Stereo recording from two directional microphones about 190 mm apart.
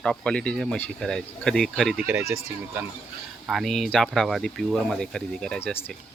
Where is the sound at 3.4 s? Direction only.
Centre (ahead or behind).